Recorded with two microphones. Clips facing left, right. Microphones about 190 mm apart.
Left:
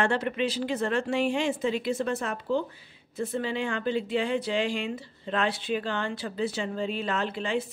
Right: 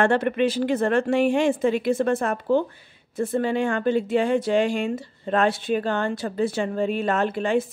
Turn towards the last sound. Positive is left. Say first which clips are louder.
# right 7 dB
turn(degrees=-50)  # may be behind; listen again after turning